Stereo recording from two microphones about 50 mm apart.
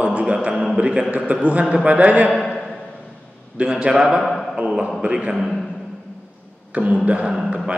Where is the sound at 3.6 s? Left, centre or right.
Centre.